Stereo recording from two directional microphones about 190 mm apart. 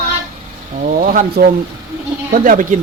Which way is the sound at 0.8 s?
45° right (ahead or behind).